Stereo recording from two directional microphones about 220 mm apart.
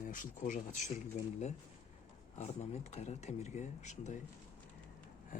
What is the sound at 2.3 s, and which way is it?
Speech, 30° left (ahead or behind).